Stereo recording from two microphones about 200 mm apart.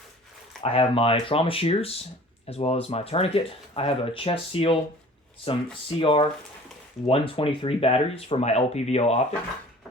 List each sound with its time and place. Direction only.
0.6 s speech: 30° left (ahead or behind)